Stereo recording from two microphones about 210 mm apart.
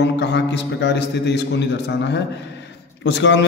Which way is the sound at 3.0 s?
60° left (ahead or behind).